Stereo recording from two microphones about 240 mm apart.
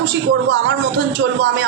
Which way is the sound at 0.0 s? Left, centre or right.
Right.